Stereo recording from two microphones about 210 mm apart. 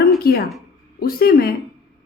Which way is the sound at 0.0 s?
45° left (ahead or behind).